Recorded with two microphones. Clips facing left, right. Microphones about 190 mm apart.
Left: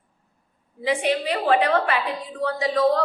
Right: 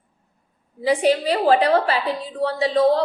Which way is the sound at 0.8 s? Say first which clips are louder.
Right 4 dB; 35° right (ahead or behind).